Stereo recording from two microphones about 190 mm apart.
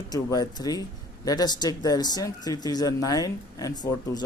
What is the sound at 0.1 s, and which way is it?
Speech, 20° left (ahead or behind).